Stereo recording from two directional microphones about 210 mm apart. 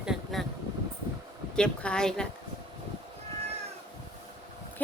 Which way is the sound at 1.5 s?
5° left (ahead or behind).